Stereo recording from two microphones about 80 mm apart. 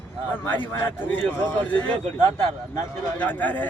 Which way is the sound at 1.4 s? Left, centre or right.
Left.